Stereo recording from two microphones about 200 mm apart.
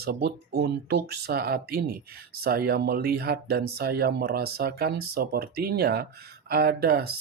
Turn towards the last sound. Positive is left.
turn(degrees=-50)  # may be behind; listen again after turning